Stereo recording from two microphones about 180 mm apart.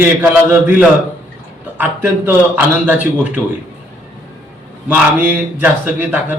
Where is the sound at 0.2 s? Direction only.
10° right (ahead or behind).